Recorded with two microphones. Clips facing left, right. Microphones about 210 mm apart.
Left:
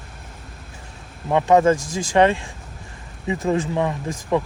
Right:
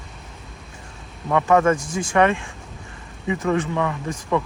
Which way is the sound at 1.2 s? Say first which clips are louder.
Left 2 dB; 25° left (ahead or behind).